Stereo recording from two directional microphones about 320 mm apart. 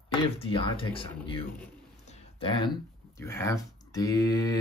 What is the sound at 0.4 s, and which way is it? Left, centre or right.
Speech, centre.